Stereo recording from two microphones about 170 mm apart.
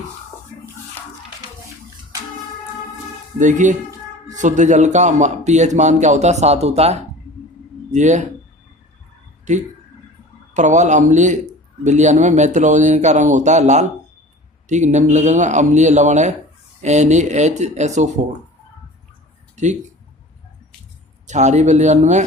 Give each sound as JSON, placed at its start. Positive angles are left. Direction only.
{"t": 3.3, "sound": "speech", "side_deg": -45}
{"t": 10.5, "sound": "speech", "side_deg": -45}
{"t": 21.2, "sound": "speech", "side_deg": -45}